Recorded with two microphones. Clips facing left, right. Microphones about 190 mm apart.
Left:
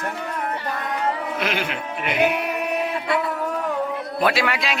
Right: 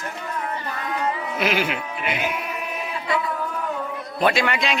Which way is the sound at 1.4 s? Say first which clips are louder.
Right 2 dB; 5° right (ahead or behind).